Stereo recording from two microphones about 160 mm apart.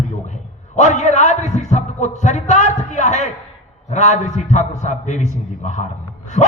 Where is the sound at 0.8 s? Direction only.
45° left (ahead or behind).